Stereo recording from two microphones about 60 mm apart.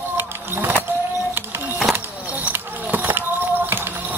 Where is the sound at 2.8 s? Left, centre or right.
Right.